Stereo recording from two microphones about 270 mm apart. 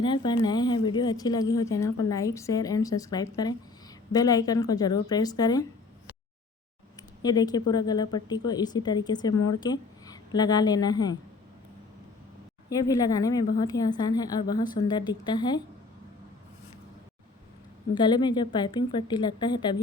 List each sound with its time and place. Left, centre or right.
0.0 s a woman's voice: centre
7.2 s a woman's voice: centre
12.9 s a woman's voice: centre
17.9 s a woman's voice: centre